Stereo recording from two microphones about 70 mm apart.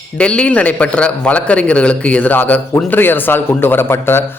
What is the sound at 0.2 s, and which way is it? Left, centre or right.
A man's voice, centre.